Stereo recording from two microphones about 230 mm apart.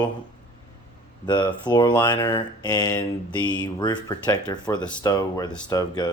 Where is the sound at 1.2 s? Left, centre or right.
Centre.